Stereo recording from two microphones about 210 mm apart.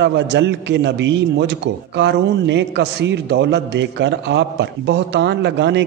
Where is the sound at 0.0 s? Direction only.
55° right (ahead or behind).